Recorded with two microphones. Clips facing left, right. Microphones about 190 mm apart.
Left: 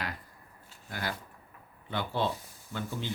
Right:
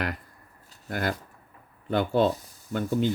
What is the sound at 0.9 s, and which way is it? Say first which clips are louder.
Speech: right 8 dB; 55° right (ahead or behind).